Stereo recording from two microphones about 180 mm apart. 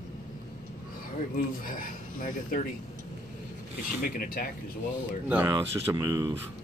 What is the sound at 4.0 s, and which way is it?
Speech, 50° left (ahead or behind).